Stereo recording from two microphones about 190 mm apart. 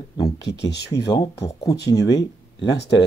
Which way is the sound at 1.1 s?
20° left (ahead or behind).